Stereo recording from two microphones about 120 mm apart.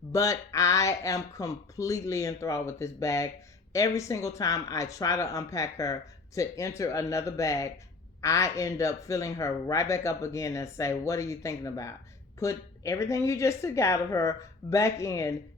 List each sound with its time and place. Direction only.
0.1 s speech: 25° left (ahead or behind)